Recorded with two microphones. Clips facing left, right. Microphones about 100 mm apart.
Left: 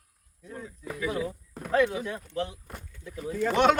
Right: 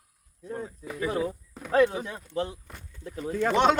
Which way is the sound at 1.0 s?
40° right (ahead or behind).